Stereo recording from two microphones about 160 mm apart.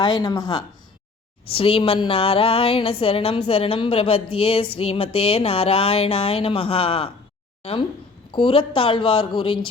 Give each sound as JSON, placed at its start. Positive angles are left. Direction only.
{"t": 0.0, "sound": "speech", "side_deg": 25}